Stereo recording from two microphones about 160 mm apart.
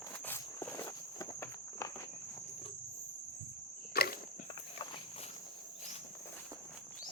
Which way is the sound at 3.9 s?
75° left (ahead or behind).